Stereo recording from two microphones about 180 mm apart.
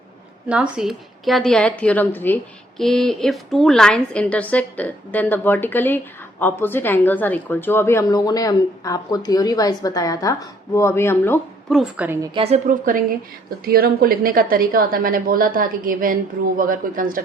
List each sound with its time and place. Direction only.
0.4 s a woman's voice: 5° right (ahead or behind); by 11.3 s 15° left (ahead or behind)
11.7 s a woman's voice: 5° right (ahead or behind)
12.3 s a woman's voice: 30° right (ahead or behind)
12.6 s a woman's voice: 45° right (ahead or behind)